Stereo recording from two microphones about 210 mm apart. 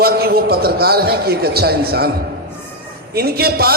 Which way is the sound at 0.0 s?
45° right (ahead or behind).